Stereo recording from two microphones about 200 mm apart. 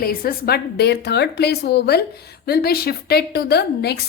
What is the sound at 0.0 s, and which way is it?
A woman's voice, 45° left (ahead or behind).